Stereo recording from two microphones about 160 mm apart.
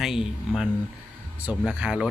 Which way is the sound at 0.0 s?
Centre (ahead or behind).